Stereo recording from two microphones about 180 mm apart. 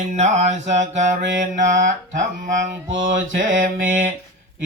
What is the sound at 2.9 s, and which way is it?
Mantra, 90° right.